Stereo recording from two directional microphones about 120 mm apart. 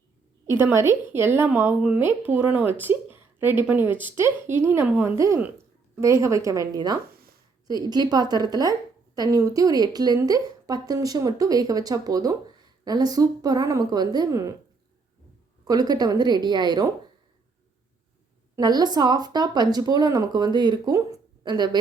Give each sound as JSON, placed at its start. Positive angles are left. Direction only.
{"t": 0.5, "sound": "a woman's voice", "side_deg": -20}
{"t": 15.6, "sound": "speech", "side_deg": -35}
{"t": 18.5, "sound": "speech", "side_deg": -35}